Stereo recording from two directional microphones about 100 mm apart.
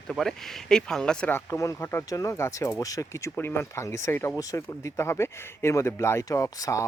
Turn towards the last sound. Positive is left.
turn(degrees=35)  # may be behind; listen again after turning